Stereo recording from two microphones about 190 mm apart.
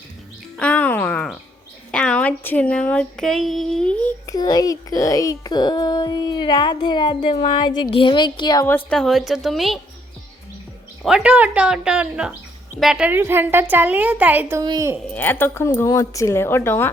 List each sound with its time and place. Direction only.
0.5 s music: 5° left (ahead or behind)
1.9 s speech: 5° left (ahead or behind)
4.3 s a child's voice: 20° left (ahead or behind); by 9.8 s centre (ahead or behind)
11.0 s a woman's voice: 5° right (ahead or behind)
15.1 s a woman's voice: 10° left (ahead or behind)